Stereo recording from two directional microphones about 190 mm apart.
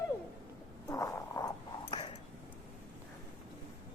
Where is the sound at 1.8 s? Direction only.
25° left (ahead or behind).